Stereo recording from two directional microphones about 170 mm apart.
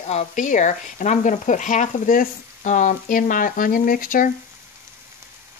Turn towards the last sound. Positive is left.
turn(degrees=55)  # may be behind; listen again after turning